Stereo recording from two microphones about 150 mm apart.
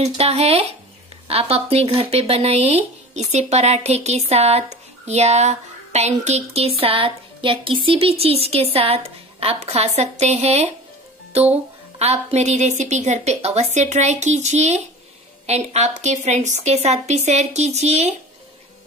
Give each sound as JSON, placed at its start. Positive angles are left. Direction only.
{"t": 0.0, "sound": "speech", "side_deg": -45}
{"t": 12.0, "sound": "speech", "side_deg": -45}